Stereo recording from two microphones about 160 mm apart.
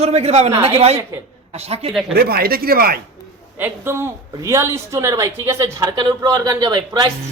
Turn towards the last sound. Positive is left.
turn(degrees=-25)  # may be behind; listen again after turning